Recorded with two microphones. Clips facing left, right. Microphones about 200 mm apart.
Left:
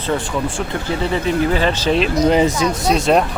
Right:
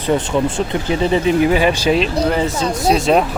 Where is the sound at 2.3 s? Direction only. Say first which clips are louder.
Left 3 dB; 15° left (ahead or behind).